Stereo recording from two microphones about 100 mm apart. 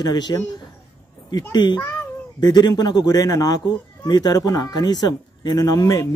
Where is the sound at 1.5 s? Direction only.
45° left (ahead or behind).